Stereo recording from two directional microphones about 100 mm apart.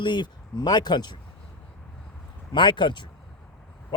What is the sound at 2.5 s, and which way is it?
Speech, 50° left (ahead or behind).